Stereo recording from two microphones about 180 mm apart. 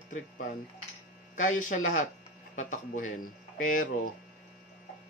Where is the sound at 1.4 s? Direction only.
45° left (ahead or behind).